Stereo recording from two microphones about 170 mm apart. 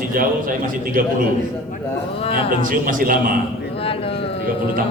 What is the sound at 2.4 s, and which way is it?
Speech, 55° right (ahead or behind).